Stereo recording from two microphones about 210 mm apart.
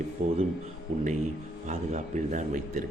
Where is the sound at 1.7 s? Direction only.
35° right (ahead or behind).